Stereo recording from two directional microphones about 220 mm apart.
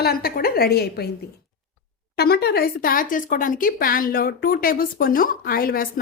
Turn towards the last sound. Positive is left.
turn(degrees=40)  # may be behind; listen again after turning